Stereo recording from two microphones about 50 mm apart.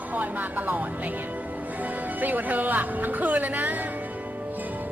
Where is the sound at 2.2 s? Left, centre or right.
Right.